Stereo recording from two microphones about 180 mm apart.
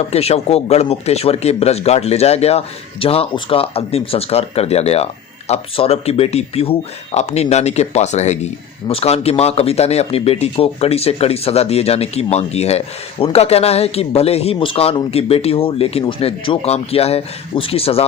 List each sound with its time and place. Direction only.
0.1 s speech: 35° left (ahead or behind)